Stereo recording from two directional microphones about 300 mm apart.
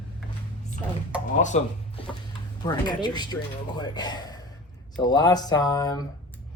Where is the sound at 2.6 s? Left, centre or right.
Centre.